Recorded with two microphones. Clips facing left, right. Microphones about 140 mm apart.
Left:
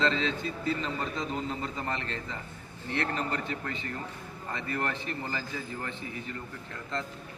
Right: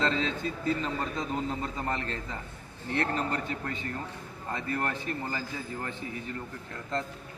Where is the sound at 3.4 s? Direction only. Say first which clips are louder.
Right 1 dB; 45° right (ahead or behind).